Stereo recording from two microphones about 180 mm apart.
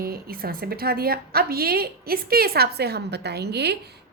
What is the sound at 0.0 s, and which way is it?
A woman's voice, 55° right (ahead or behind).